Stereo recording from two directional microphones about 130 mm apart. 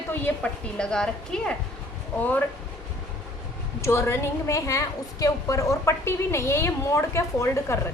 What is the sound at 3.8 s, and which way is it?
A woman's voice, 20° left (ahead or behind).